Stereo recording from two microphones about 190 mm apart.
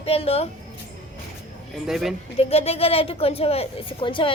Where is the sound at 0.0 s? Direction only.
30° left (ahead or behind).